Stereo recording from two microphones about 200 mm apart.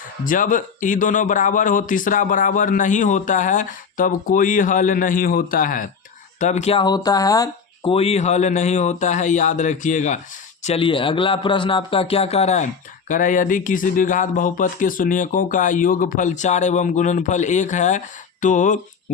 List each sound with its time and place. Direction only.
0.3 s a man's voice: 40° left (ahead or behind)